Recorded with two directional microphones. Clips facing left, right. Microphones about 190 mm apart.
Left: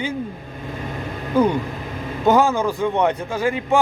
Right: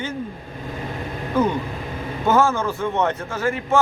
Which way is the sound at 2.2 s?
15° left (ahead or behind).